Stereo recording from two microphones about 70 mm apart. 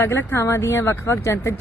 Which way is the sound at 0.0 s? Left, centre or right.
Left.